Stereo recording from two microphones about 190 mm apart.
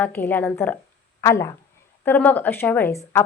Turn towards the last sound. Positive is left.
turn(degrees=10)  # may be behind; listen again after turning